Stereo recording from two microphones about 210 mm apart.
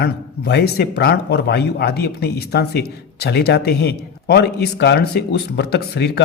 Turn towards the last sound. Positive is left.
turn(degrees=50)  # may be behind; listen again after turning